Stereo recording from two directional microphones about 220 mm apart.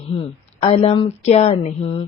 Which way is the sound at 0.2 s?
25° left (ahead or behind).